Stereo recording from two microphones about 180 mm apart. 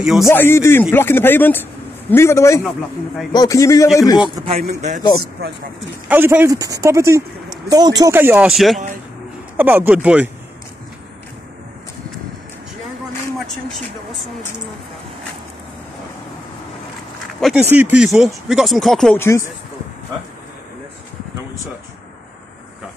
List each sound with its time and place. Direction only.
0.0 s speech: centre (ahead or behind)
0.3 s speech: 15° left (ahead or behind)
4.6 s speech: 40° right (ahead or behind)
6.0 s speech: 10° right (ahead or behind)
17.4 s speech: centre (ahead or behind)
17.6 s speech: 10° right (ahead or behind)
19.1 s speech: 15° left (ahead or behind)